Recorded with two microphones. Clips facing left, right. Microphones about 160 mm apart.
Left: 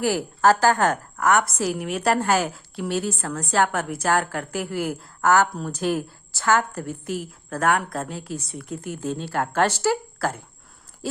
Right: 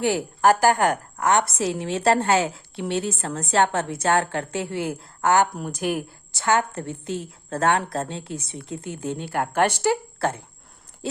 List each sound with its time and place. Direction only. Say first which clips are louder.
0.0 s a woman's voice: even; 20° right (ahead or behind)